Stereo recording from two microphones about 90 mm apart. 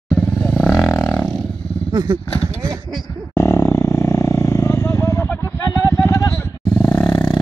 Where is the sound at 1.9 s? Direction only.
60° right (ahead or behind).